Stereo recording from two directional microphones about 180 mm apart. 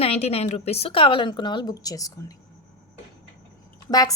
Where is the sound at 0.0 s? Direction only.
35° left (ahead or behind).